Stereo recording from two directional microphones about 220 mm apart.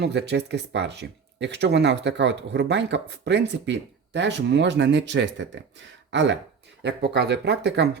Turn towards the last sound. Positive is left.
turn(degrees=-50)  # may be behind; listen again after turning